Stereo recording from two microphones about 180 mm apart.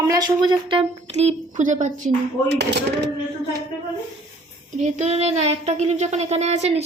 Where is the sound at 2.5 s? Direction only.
65° right (ahead or behind).